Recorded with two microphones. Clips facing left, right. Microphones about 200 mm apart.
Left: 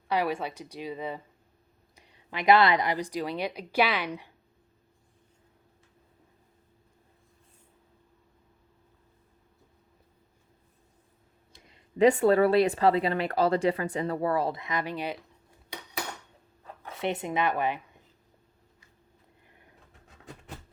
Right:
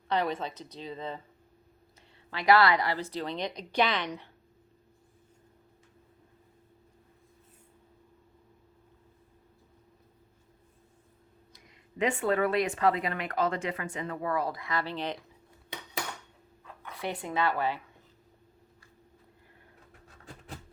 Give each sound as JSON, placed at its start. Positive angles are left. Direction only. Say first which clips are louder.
{"t": 0.1, "sound": "speech", "louder": "left 2 dB", "side_deg": 10}
{"t": 11.5, "sound": "speech", "louder": "left 7 dB", "side_deg": 30}
{"t": 16.8, "sound": "speech", "louder": "left 5 dB", "side_deg": 25}